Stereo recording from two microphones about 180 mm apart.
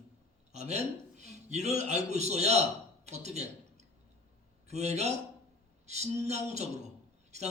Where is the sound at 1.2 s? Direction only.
40° right (ahead or behind).